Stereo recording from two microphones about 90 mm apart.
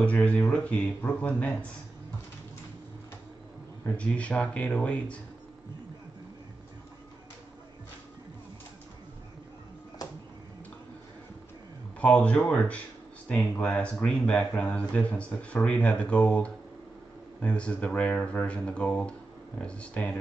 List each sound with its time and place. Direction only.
0.0 s speech: 15° left (ahead or behind)
3.9 s speech: 15° left (ahead or behind)
12.0 s speech: 15° left (ahead or behind)